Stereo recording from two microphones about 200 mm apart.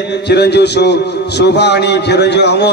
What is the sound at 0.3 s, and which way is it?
A man's voice, 55° left (ahead or behind).